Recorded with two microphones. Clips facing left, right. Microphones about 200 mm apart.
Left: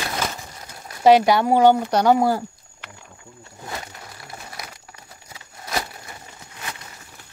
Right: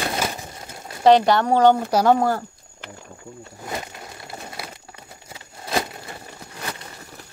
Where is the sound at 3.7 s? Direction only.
25° right (ahead or behind).